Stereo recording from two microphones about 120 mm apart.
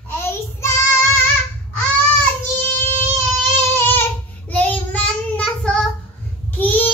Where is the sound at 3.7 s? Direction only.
15° left (ahead or behind).